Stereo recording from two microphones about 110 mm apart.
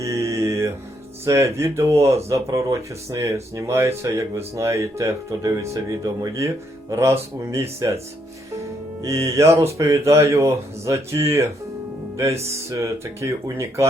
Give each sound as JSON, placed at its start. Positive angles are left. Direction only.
{"t": 0.0, "sound": "mantra", "side_deg": -30}
{"t": 1.2, "sound": "speech", "side_deg": -25}
{"t": 9.0, "sound": "speech", "side_deg": -30}